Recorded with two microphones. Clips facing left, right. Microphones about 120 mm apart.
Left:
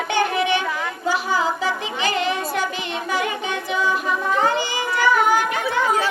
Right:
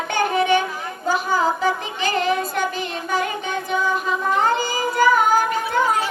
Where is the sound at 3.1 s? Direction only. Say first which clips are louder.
Right 1 dB; 45° right (ahead or behind).